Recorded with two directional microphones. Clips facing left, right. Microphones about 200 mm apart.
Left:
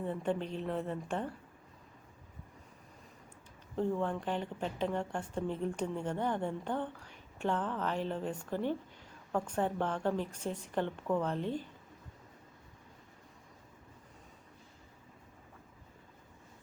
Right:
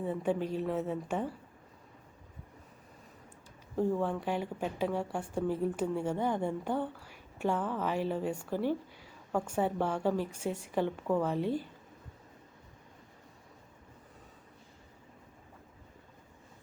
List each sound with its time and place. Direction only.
0.0 s speech: 10° right (ahead or behind)
3.8 s speech: 10° right (ahead or behind)